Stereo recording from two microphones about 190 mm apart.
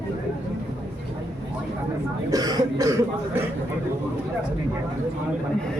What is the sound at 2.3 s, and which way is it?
Speech, 20° right (ahead or behind).